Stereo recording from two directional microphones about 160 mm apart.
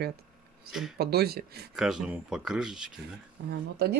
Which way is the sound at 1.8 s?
5° right (ahead or behind).